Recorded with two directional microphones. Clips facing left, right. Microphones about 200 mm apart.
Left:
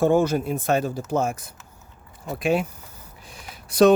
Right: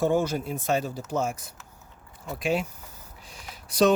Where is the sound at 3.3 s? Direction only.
55° left (ahead or behind).